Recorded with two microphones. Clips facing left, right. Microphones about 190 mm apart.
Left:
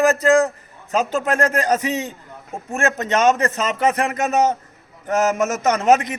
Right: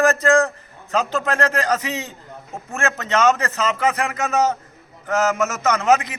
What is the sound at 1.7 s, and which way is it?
A man's voice, 15° left (ahead or behind).